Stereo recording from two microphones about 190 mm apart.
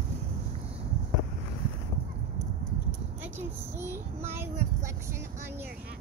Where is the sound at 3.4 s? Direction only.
10° right (ahead or behind).